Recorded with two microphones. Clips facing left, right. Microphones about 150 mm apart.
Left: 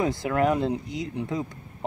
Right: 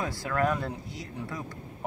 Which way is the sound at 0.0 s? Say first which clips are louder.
Left 5 dB; 20° left (ahead or behind).